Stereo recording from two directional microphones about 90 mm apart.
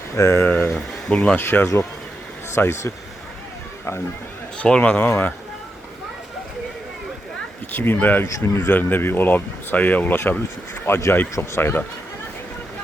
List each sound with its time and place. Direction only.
0.3 s speech: 15° left (ahead or behind)
1.4 s speech: 25° left (ahead or behind)
4.5 s speech: 10° left (ahead or behind)
7.7 s speech: 25° left (ahead or behind)